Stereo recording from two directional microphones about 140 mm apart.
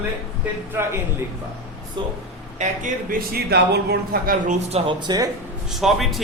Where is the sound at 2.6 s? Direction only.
80° right.